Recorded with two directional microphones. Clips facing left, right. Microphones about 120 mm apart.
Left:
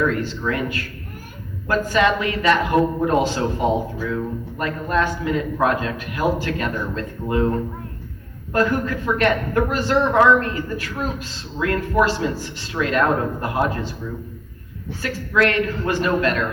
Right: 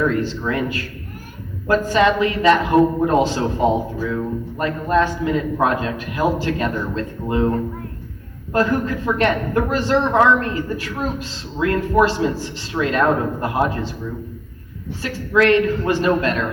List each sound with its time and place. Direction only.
0.1 s a man's voice: 25° right (ahead or behind)
8.5 s a man's voice: 25° right (ahead or behind)
15.0 s a man's voice: 25° right (ahead or behind)